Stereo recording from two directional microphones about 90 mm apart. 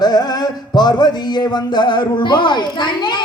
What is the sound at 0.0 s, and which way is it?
Music, 50° left (ahead or behind).